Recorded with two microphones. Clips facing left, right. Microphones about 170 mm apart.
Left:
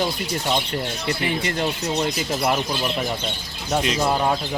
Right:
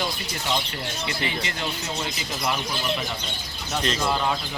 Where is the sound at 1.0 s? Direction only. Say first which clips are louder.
Left 5 dB; 50° left (ahead or behind).